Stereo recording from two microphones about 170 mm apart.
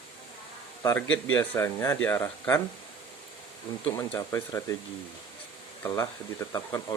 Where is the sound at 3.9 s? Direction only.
15° left (ahead or behind).